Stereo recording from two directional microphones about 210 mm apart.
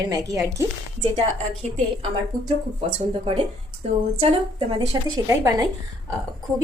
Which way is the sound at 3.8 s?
30° right (ahead or behind).